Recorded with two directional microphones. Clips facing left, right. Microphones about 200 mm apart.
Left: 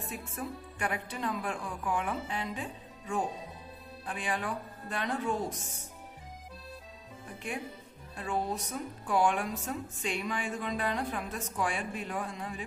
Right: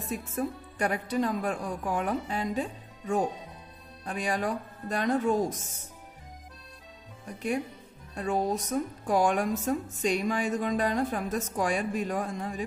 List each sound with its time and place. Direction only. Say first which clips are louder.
0.1 s speech: right 9 dB; 40° right (ahead or behind)
8.2 s speech: right 5 dB; 40° right (ahead or behind)